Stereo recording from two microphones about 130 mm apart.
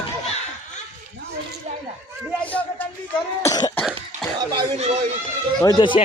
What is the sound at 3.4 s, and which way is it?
Speech, 25° left (ahead or behind).